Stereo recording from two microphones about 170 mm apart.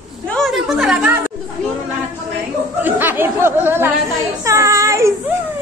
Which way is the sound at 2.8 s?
10° right (ahead or behind).